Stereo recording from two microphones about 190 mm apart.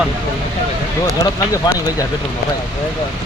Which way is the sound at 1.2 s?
15° left (ahead or behind).